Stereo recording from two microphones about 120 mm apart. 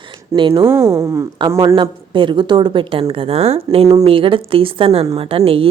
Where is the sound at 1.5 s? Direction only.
45° right (ahead or behind).